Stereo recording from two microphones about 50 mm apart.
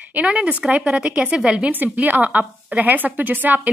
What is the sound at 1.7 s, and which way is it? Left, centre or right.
Speech, right.